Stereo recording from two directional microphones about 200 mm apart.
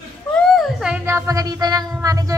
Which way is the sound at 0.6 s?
Centre (ahead or behind).